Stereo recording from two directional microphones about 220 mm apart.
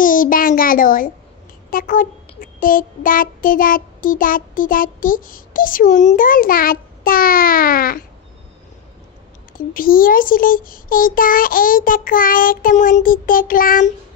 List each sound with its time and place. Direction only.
0.0 s a child's voice: 40° left (ahead or behind)
9.5 s a child's voice: 40° left (ahead or behind)